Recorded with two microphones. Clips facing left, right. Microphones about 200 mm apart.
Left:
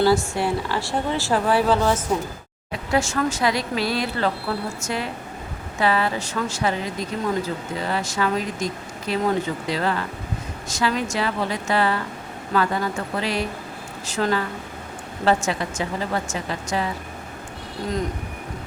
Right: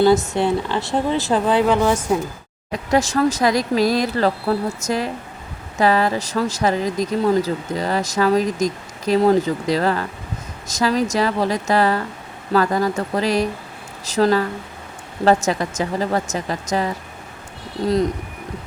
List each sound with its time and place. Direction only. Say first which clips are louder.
0.0 s a woman's voice: right 4 dB; 20° right (ahead or behind)
2.7 s speech: right 4 dB; 40° right (ahead or behind)